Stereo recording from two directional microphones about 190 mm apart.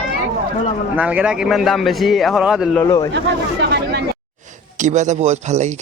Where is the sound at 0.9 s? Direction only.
5° right (ahead or behind).